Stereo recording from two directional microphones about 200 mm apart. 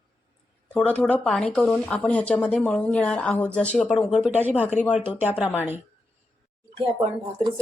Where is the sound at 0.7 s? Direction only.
5° left (ahead or behind); by 5.8 s 10° right (ahead or behind).